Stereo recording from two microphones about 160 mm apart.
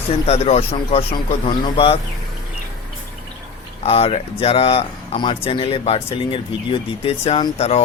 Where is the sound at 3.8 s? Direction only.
40° left (ahead or behind).